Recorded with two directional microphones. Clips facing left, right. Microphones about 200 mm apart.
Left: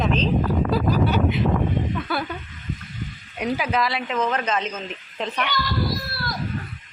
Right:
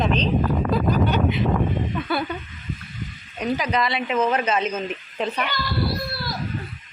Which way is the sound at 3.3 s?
10° left (ahead or behind).